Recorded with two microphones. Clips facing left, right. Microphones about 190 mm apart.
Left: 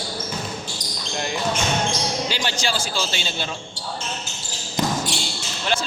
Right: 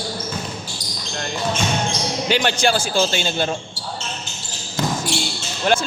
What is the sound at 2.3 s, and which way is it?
Speech, 60° right (ahead or behind).